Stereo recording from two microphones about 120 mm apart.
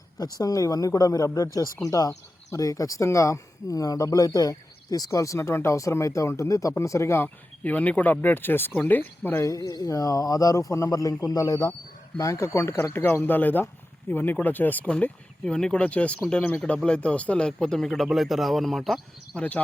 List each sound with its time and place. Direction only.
0.2 s speech: 30° left (ahead or behind); by 19.6 s 10° left (ahead or behind)